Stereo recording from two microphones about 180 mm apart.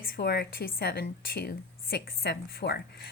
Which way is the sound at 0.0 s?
60° left (ahead or behind).